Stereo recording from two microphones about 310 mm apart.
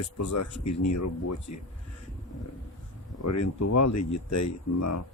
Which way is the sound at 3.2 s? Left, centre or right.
Left.